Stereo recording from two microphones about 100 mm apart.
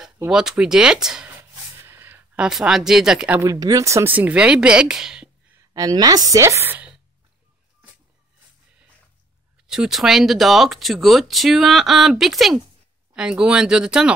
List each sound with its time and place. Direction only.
0.3 s a woman's voice: 5° right (ahead or behind)
1.8 s a sound: 25° right (ahead or behind)
2.4 s speech: 5° right (ahead or behind)
3.3 s a woman's voice: 35° right (ahead or behind)
4.1 s a woman's voice: 15° right (ahead or behind)
5.7 s a woman's voice: 40° right (ahead or behind); by 6.9 s 20° right (ahead or behind)
9.7 s a woman's voice: 5° right (ahead or behind)